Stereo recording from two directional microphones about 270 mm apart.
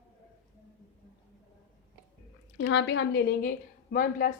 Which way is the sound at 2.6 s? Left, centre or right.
Left.